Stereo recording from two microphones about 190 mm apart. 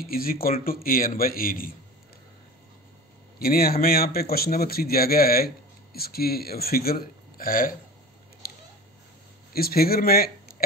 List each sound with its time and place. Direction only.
0.1 s a man's voice: 50° left (ahead or behind)
3.3 s a man's voice: 50° left (ahead or behind)
8.4 s a sound: 50° left (ahead or behind)
9.5 s speech: 55° left (ahead or behind)